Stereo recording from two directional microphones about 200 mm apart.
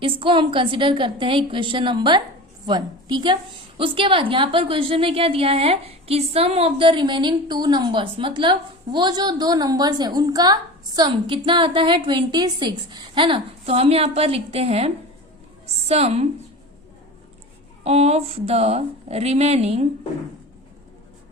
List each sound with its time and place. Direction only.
0.0 s a woman's voice: 25° right (ahead or behind)
17.8 s speech: 30° right (ahead or behind)